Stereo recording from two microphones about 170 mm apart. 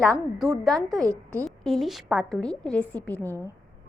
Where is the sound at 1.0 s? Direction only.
20° right (ahead or behind).